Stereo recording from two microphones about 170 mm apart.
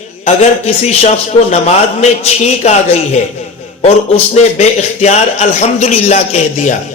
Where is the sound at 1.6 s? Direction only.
40° left (ahead or behind).